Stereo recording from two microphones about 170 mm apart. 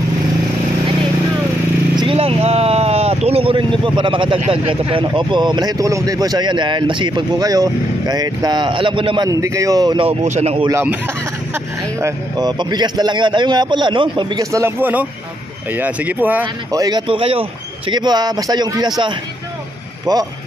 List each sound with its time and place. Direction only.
2.0 s speech: 35° right (ahead or behind)
10.2 s speech: 40° right (ahead or behind)
10.7 s speech: 15° right (ahead or behind)
16.7 s speech: 25° right (ahead or behind)